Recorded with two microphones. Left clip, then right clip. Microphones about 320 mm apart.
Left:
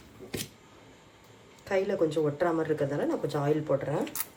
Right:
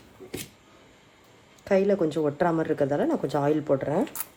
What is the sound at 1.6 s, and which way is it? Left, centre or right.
Speech, right.